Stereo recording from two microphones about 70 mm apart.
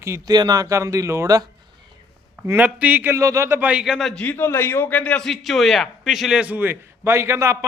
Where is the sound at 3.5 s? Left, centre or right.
Right.